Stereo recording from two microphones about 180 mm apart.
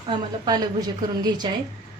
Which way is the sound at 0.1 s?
20° right (ahead or behind).